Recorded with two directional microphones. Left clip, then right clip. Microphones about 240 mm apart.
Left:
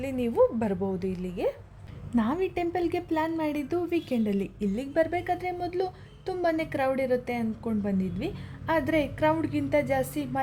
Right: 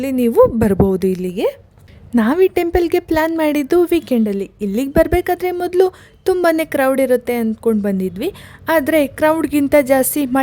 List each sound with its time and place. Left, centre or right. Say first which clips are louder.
0.0 s a woman's voice: right 12 dB; right